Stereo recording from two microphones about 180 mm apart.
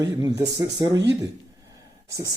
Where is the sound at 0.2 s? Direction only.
20° right (ahead or behind).